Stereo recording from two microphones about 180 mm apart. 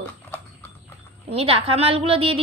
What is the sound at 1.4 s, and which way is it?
A woman's voice, 30° right (ahead or behind).